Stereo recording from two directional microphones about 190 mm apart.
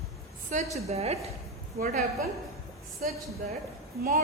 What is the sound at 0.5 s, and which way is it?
Speech, 40° right (ahead or behind).